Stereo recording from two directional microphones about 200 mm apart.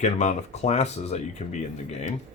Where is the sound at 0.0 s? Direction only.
35° left (ahead or behind).